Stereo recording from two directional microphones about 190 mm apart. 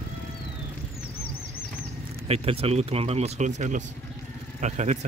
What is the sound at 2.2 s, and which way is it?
Speech, 30° right (ahead or behind).